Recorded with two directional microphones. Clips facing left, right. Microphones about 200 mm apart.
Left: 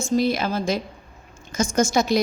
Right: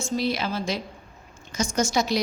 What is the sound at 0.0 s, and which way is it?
A woman's voice, 50° left (ahead or behind).